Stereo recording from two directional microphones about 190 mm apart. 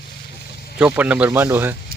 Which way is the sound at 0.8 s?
5° right (ahead or behind).